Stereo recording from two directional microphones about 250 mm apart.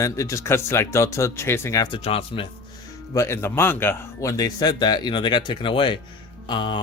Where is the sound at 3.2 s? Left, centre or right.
Centre.